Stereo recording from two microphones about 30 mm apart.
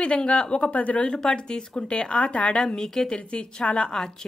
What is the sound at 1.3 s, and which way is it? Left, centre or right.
Speech, left.